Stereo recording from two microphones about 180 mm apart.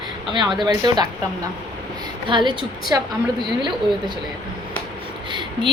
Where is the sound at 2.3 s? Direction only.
25° right (ahead or behind).